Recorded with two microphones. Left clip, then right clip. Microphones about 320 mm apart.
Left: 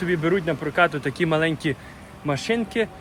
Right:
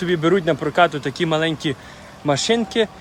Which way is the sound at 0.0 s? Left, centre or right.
Centre.